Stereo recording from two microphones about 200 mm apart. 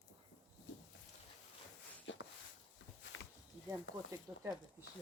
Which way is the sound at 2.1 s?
65° left (ahead or behind).